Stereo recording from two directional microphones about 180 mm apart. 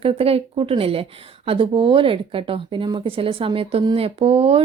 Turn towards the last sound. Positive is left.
turn(degrees=-35)  # may be behind; listen again after turning